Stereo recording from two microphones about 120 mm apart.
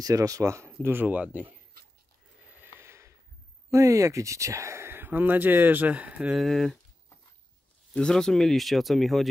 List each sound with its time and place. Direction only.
0.0 s speech: 30° right (ahead or behind); by 1.5 s 10° right (ahead or behind)
2.4 s snort: 15° right (ahead or behind)
2.8 s snort: 25° right (ahead or behind)
3.7 s speech: 25° right (ahead or behind); by 6.8 s centre (ahead or behind)
7.9 s speech: 5° left (ahead or behind)